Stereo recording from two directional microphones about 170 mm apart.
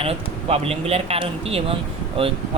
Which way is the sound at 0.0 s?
35° right (ahead or behind).